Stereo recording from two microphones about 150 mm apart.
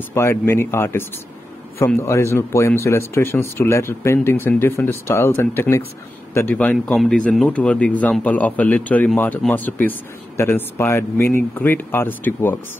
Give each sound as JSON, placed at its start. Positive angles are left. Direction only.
{"t": 0.1, "sound": "speech", "side_deg": 15}